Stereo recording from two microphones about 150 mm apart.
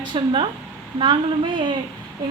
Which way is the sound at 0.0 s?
30° right (ahead or behind).